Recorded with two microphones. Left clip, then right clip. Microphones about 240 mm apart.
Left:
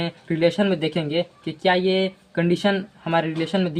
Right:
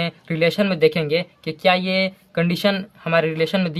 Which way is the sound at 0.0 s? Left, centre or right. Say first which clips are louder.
Right 1 dB; right.